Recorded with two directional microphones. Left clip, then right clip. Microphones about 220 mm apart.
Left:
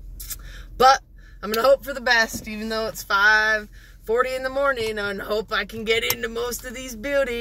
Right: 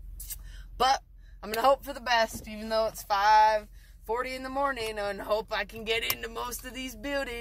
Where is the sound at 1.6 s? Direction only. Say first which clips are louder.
Left 6 dB; 15° right (ahead or behind).